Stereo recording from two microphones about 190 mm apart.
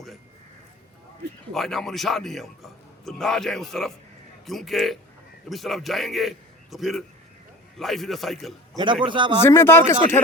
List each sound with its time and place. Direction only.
1.5 s a man's voice: centre (ahead or behind)
8.8 s a man's voice: 25° right (ahead or behind)
9.4 s speech: 15° left (ahead or behind)